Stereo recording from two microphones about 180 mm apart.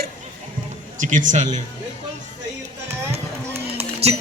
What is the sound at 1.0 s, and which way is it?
Speech, 45° right (ahead or behind).